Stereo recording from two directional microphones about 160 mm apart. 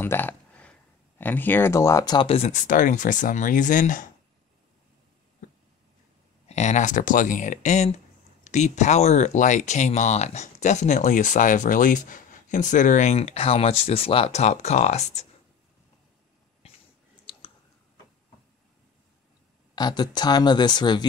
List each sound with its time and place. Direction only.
0.0 s a sound: 15° left (ahead or behind)
2.2 s speech: 40° left (ahead or behind)
6.5 s speech: 45° left (ahead or behind)
17.3 s clicking: 30° left (ahead or behind)
19.7 s speech: 25° left (ahead or behind)